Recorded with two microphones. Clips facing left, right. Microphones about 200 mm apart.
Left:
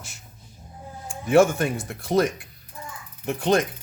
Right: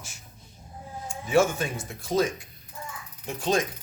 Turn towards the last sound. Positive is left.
turn(degrees=60)  # may be behind; listen again after turning